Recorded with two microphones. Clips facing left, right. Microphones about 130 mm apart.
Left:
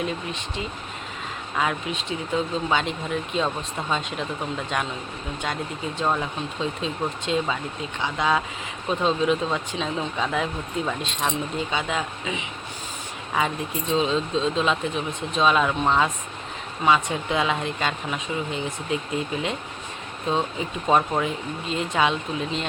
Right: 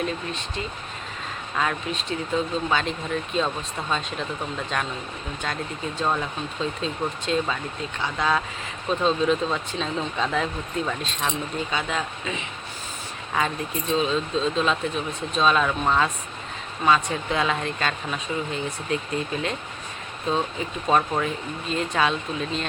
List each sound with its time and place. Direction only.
0.3 s speech: 20° left (ahead or behind)
6.6 s speech: 20° left (ahead or behind)
13.9 s speech: 20° left (ahead or behind)